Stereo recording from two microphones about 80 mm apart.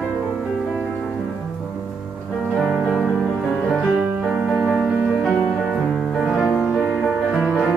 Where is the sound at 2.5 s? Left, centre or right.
Centre.